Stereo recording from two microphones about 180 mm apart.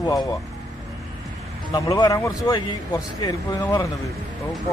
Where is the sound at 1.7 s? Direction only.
20° left (ahead or behind).